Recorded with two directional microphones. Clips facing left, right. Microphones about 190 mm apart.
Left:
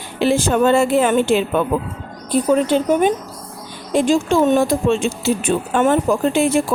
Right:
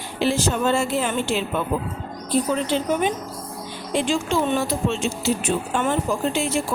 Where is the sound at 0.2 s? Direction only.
55° left (ahead or behind).